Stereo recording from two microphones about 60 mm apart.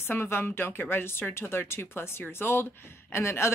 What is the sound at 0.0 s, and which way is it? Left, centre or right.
A woman's voice, left.